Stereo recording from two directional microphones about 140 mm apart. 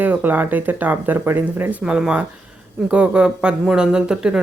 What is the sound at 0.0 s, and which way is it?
Speech, 15° right (ahead or behind).